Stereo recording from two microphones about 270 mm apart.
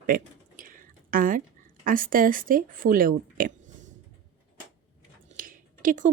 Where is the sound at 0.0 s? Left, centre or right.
Right.